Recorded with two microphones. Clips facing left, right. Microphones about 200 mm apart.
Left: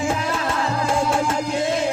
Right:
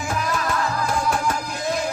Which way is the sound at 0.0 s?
25° left (ahead or behind).